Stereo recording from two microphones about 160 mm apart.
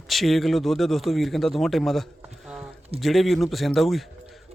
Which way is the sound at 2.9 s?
Centre (ahead or behind).